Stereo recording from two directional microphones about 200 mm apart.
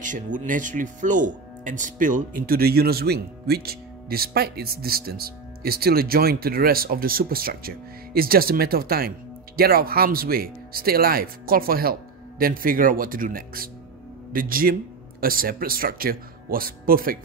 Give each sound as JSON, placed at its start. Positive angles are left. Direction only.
{"t": 0.0, "sound": "speech", "side_deg": -40}